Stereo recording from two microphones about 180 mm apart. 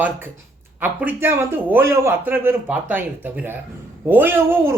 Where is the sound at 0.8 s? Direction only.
10° right (ahead or behind).